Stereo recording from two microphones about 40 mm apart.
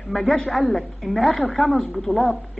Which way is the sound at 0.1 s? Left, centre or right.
Centre.